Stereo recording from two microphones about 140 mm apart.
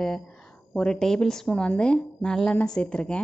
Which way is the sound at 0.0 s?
5° left (ahead or behind).